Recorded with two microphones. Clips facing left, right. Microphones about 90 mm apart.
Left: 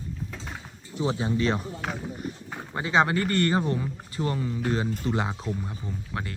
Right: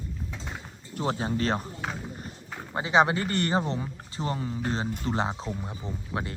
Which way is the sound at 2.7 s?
20° right (ahead or behind).